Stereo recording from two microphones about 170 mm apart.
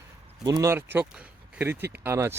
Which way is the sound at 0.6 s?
15° right (ahead or behind).